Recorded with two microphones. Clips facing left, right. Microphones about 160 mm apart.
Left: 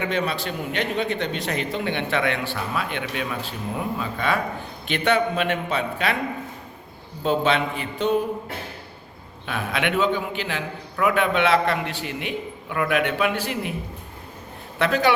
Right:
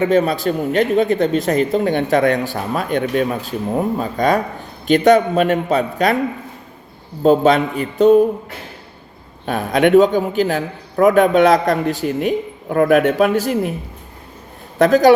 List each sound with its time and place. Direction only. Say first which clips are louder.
0.0 s a man's voice: right 10 dB; 40° right (ahead or behind)
7.2 s a man's voice: right 9 dB; 40° right (ahead or behind)
9.5 s a man's voice: right 12 dB; 40° right (ahead or behind)
14.8 s a man's voice: right 10 dB; 40° right (ahead or behind)